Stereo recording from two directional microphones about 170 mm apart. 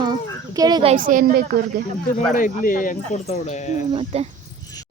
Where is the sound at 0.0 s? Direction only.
25° right (ahead or behind).